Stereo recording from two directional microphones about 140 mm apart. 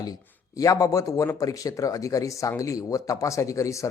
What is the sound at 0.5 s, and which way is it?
A man's voice, 25° left (ahead or behind).